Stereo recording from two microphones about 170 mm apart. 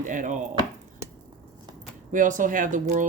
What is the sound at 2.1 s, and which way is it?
Speech, 50° right (ahead or behind).